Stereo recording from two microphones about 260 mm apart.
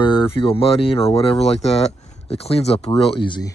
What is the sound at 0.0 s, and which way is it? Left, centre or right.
Speech, centre.